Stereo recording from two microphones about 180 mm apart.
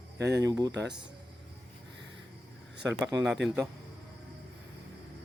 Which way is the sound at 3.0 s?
20° right (ahead or behind).